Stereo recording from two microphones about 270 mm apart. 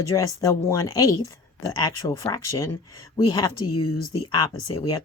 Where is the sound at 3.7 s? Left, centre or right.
Left.